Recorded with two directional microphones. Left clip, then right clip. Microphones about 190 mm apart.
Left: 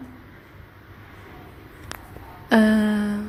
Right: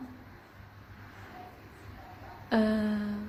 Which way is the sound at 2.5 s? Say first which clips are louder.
Left 10 dB; 40° left (ahead or behind).